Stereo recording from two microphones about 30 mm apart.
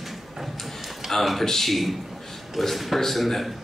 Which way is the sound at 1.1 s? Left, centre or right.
Centre.